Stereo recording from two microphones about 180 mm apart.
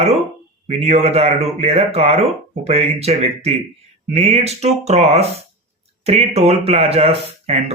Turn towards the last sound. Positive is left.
turn(degrees=-35)  # may be behind; listen again after turning